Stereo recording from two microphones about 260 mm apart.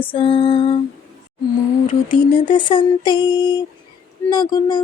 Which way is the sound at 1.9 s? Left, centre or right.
Centre.